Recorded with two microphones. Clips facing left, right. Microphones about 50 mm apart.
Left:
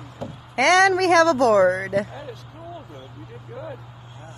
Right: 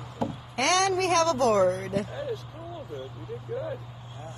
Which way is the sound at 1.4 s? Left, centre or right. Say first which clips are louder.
Left 6 dB; left.